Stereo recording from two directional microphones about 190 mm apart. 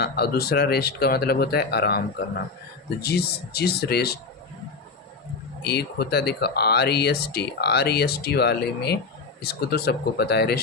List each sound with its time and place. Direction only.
0.0 s speech: 55° left (ahead or behind)
5.6 s speech: 60° left (ahead or behind)